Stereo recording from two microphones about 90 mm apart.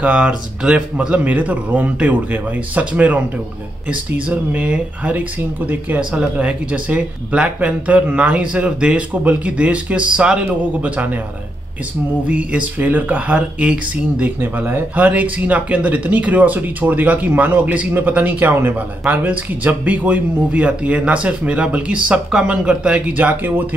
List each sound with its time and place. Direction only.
0.0 s speech: 15° right (ahead or behind)
12.3 s speech: 15° right (ahead or behind)